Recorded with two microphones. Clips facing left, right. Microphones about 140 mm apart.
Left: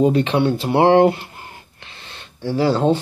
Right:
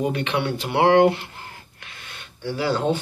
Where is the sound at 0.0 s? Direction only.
30° left (ahead or behind).